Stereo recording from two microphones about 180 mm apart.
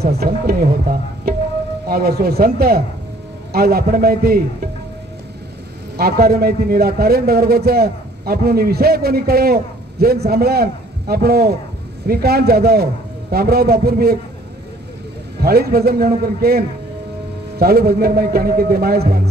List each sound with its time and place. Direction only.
0.0 s a man's voice: 60° right (ahead or behind)
1.9 s a man's voice: 60° right (ahead or behind)
5.9 s a man's voice: 60° right (ahead or behind)
15.4 s a man's voice: 60° right (ahead or behind)